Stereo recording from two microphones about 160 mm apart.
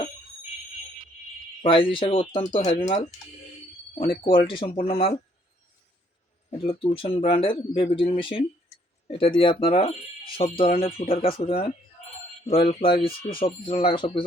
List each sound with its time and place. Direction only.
1.6 s speech: 35° left (ahead or behind)
6.7 s speech: 35° left (ahead or behind)